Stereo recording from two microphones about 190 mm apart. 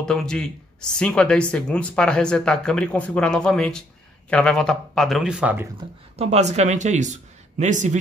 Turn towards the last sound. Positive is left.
turn(degrees=-40)  # may be behind; listen again after turning